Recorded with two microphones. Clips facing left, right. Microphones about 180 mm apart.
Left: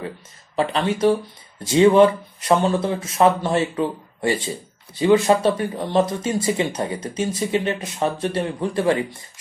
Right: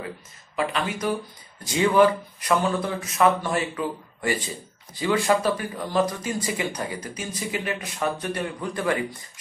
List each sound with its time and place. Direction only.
0.6 s speech: 30° left (ahead or behind)